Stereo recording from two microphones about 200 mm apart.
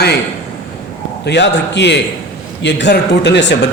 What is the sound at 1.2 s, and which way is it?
Speech, 60° left (ahead or behind).